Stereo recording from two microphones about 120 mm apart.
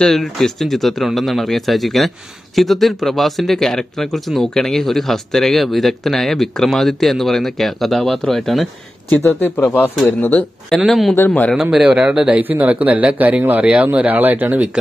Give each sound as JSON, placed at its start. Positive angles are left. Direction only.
{"t": 0.0, "sound": "speech", "side_deg": 5}
{"t": 9.2, "sound": "speech", "side_deg": 25}
{"t": 10.7, "sound": "speech", "side_deg": 0}
{"t": 11.1, "sound": "speech", "side_deg": 15}
{"t": 11.5, "sound": "speech", "side_deg": -5}